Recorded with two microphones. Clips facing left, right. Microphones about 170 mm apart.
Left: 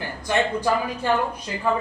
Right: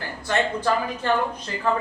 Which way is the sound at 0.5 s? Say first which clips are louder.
Left 1 dB; 10° left (ahead or behind).